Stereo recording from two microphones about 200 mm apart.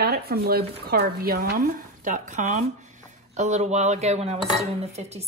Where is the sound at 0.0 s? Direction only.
50° right (ahead or behind).